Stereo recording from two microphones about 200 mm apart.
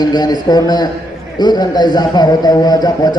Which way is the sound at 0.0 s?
20° left (ahead or behind).